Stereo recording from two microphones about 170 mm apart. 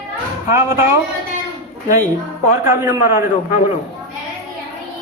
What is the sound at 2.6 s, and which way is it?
Speech, 15° right (ahead or behind).